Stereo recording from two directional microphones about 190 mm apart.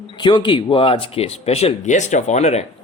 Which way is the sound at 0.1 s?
25° left (ahead or behind).